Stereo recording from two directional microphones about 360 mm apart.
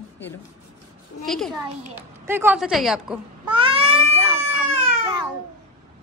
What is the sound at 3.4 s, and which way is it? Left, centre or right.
Cat, centre.